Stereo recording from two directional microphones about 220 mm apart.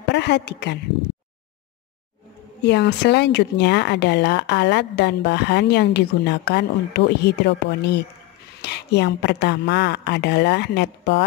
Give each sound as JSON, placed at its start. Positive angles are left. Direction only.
{"t": 0.1, "sound": "a woman's voice", "side_deg": 50}
{"t": 2.6, "sound": "speech", "side_deg": 50}